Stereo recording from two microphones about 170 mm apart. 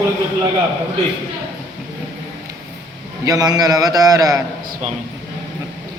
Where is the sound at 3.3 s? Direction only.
25° right (ahead or behind).